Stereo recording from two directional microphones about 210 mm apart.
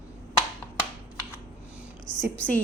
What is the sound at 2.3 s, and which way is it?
Speech, 5° left (ahead or behind).